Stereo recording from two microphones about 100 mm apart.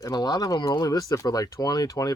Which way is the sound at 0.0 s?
40° left (ahead or behind).